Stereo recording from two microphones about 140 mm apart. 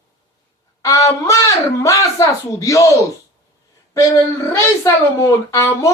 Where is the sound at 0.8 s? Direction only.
25° left (ahead or behind).